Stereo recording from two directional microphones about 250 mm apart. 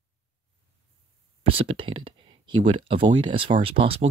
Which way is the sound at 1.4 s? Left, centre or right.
Right.